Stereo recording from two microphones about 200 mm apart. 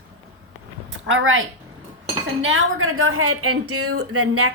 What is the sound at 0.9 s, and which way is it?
A woman's voice, 85° right.